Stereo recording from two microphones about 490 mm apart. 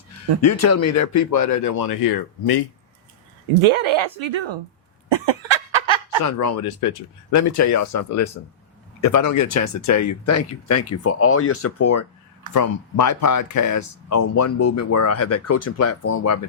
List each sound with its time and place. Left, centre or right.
0.4 s speech: left
3.6 s speech: right
5.1 s a sound: right
6.2 s speech: left